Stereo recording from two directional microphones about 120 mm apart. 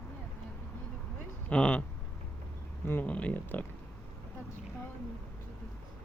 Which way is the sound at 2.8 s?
15° left (ahead or behind).